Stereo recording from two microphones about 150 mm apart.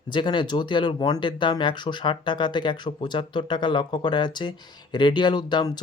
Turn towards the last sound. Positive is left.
turn(degrees=30)  # may be behind; listen again after turning